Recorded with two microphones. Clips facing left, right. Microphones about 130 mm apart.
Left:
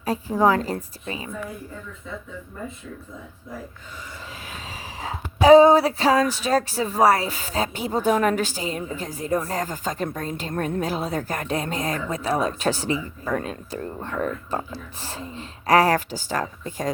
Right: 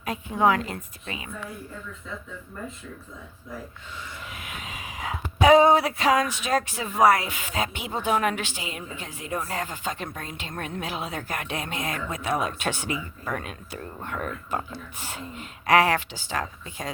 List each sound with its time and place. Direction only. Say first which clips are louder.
0.0 s speech: left 3 dB; 35° left (ahead or behind)
4.4 s speech: left 1 dB; 30° left (ahead or behind)